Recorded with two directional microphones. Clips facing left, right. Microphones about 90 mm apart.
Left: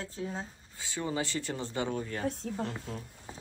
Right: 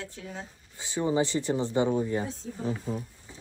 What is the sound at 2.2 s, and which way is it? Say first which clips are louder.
Speech: left 4 dB; 60° left (ahead or behind).